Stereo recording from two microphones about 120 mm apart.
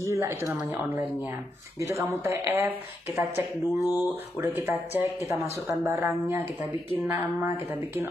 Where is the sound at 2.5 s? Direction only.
15° right (ahead or behind).